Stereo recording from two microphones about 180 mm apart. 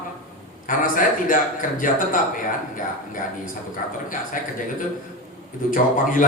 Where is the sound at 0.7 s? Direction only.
50° left (ahead or behind).